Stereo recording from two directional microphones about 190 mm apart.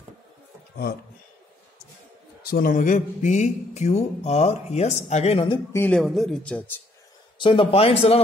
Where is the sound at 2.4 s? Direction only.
50° left (ahead or behind); by 5.6 s 30° left (ahead or behind).